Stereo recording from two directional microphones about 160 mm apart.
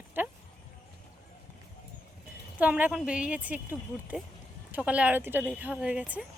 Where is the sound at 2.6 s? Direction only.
10° right (ahead or behind).